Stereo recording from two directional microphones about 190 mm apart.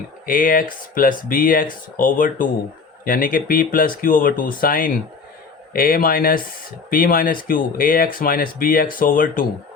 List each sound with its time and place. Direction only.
0.3 s speech: 45° left (ahead or behind)